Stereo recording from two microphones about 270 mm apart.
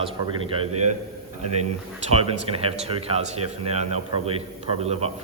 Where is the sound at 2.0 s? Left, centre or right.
Right.